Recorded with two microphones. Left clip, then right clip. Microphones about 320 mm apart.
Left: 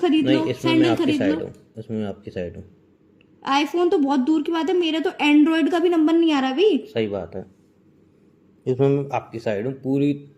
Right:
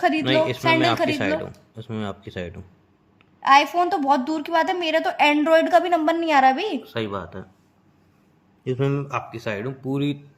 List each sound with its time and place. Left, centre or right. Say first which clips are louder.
0.0 s a woman's voice: left 1 dB; centre
0.3 s speech: right 1 dB; right
0.6 s a woman's voice: even; centre
1.7 s speech: left 1 dB; right
3.4 s a woman's voice: right 4 dB; centre
8.6 s speech: left 5 dB; centre
9.9 s speech: left 4 dB; right